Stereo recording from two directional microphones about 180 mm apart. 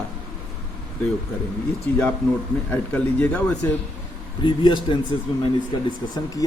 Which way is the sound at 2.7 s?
10° left (ahead or behind).